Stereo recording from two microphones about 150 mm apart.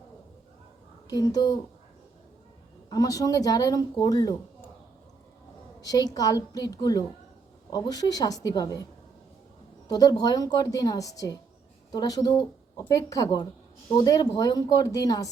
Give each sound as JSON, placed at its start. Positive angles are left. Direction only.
{"t": 1.0, "sound": "speech", "side_deg": 25}
{"t": 2.9, "sound": "speech", "side_deg": 25}
{"t": 5.8, "sound": "speech", "side_deg": 25}
{"t": 9.9, "sound": "speech", "side_deg": 25}